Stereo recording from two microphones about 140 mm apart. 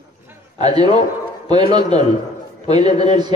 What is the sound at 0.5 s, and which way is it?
A man's voice, 30° right (ahead or behind).